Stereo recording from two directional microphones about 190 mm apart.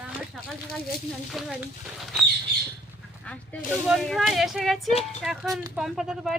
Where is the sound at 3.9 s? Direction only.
Centre (ahead or behind).